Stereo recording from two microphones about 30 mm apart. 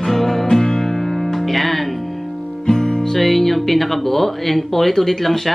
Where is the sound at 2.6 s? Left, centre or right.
Left.